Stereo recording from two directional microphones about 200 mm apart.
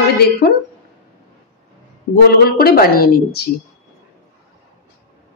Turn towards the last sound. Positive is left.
turn(degrees=50)  # may be behind; listen again after turning